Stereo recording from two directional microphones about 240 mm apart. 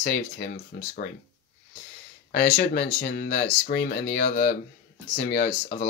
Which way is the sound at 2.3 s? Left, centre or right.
Left.